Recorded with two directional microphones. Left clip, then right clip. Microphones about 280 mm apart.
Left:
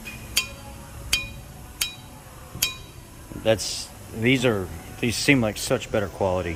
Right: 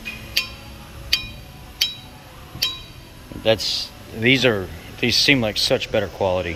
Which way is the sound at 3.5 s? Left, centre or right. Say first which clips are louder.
Right 4 dB; centre.